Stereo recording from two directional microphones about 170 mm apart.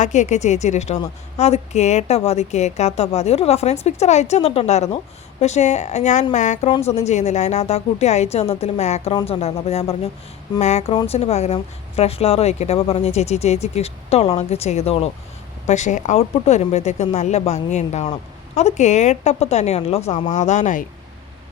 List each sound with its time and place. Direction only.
0.0 s a woman's voice: 45° left (ahead or behind)